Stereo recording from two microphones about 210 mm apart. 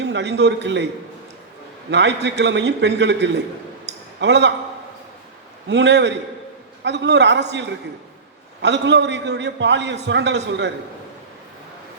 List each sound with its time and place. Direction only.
0.0 s a man's voice: 55° right (ahead or behind)
1.9 s a man's voice: 55° right (ahead or behind)
5.6 s a man's voice: 55° right (ahead or behind)
8.6 s a man's voice: 55° right (ahead or behind)